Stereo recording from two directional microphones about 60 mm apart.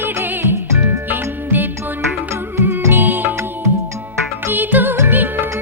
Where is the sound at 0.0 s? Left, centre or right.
Right.